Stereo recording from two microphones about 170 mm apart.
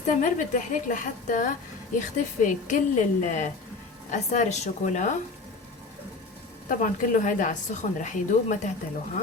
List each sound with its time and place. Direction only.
0.0 s a woman's voice: 50° left (ahead or behind)
6.7 s a woman's voice: 50° left (ahead or behind)